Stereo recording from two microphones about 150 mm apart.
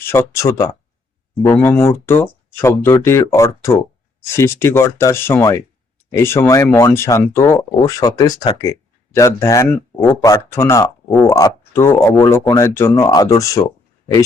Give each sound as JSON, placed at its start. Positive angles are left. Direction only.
{"t": 0.0, "sound": "speech", "side_deg": 15}